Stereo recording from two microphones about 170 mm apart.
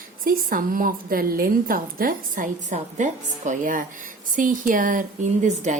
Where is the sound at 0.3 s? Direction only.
55° right (ahead or behind).